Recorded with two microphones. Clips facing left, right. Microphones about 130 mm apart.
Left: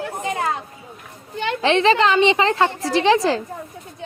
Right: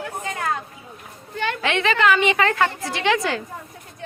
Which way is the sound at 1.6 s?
30° left (ahead or behind).